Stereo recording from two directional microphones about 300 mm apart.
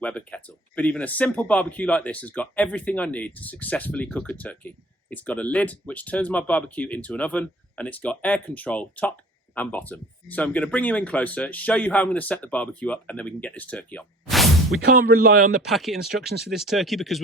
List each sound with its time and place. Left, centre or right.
0.0 s speech: centre
14.8 s speech: right
15.6 s speech: centre
16.2 s speech: right
16.5 s speech: centre